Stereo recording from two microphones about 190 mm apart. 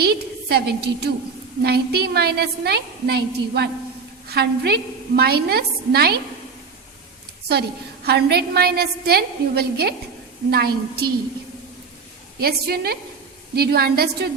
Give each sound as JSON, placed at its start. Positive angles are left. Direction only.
{"t": 0.0, "sound": "a woman's voice", "side_deg": -55}
{"t": 7.5, "sound": "a woman's voice", "side_deg": -60}
{"t": 12.4, "sound": "a woman's voice", "side_deg": -55}